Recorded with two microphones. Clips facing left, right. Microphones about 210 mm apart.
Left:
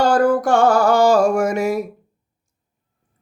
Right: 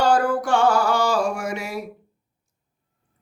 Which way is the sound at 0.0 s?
40° left (ahead or behind).